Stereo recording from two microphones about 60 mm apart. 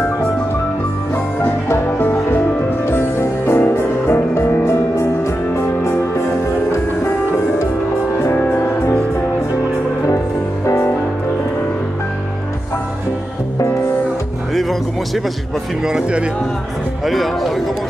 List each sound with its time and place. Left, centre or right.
1.4 s music: left
4.6 s music: left
8.4 s music: left
10.6 s music: left
14.5 s music: centre
15.8 s speech: centre
17.0 s speech: centre